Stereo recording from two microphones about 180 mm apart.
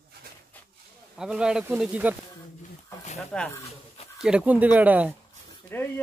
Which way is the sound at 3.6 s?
35° left (ahead or behind).